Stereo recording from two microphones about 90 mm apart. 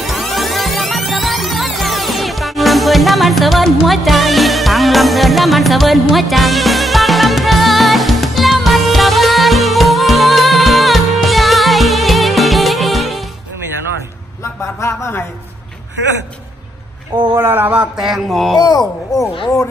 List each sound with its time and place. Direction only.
0.0 s music: centre (ahead or behind)
14.8 s speech: 30° left (ahead or behind)
17.4 s a sound: 25° right (ahead or behind)
17.9 s mantra: 5° right (ahead or behind)
18.6 s speech: 50° left (ahead or behind)